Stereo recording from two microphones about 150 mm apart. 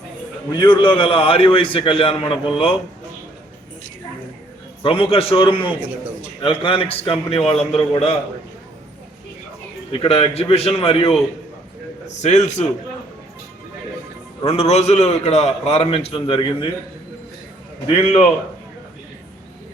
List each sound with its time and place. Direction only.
0.5 s a man's voice: 30° left (ahead or behind)
4.8 s a man's voice: 40° left (ahead or behind)
10.0 s a man's voice: 40° left (ahead or behind)
12.2 s a man's voice: 50° left (ahead or behind)
14.4 s a man's voice: 40° left (ahead or behind)
17.8 s a man's voice: 40° left (ahead or behind)